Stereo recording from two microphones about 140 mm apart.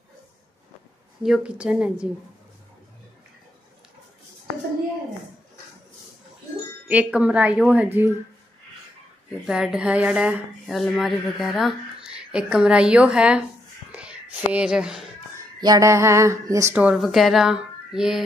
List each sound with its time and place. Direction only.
1.2 s a woman's voice: 5° right (ahead or behind)
6.9 s a woman's voice: 10° right (ahead or behind)
9.5 s a woman's voice: 5° right (ahead or behind)
15.6 s a sound: 25° right (ahead or behind)
16.7 s speech: 5° right (ahead or behind)